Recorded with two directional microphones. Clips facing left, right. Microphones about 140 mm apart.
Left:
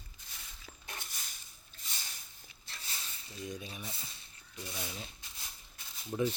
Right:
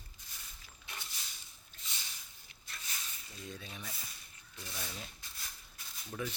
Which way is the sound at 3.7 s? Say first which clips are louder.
Left 2 dB; 25° left (ahead or behind).